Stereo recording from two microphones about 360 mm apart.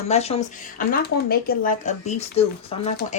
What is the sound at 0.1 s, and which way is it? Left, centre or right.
Speech, centre.